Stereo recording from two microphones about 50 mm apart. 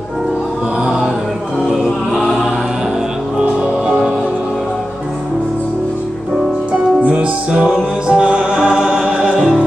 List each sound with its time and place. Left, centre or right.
3.3 s music: right
7.0 s music: right